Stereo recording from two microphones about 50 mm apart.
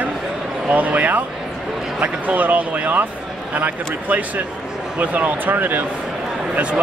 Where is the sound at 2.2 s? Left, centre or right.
Right.